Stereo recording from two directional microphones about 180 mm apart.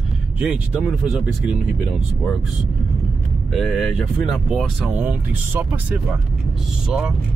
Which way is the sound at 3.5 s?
Centre (ahead or behind).